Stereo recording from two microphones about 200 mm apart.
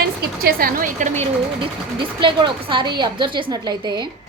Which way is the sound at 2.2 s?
25° right (ahead or behind).